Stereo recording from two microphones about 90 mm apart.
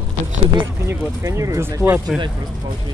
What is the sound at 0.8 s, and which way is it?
Speech, 35° right (ahead or behind).